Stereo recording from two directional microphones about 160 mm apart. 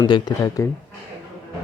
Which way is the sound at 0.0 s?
25° left (ahead or behind).